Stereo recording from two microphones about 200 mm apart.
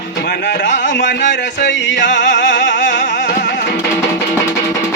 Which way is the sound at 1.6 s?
60° left (ahead or behind).